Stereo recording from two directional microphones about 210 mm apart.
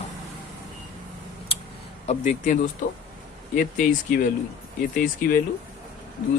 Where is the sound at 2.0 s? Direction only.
35° left (ahead or behind).